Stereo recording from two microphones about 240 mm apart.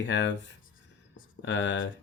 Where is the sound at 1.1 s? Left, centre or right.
Left.